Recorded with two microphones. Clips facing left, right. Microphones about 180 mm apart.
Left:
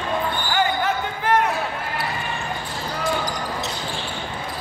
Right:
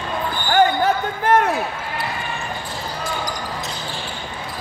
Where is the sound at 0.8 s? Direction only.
45° right (ahead or behind).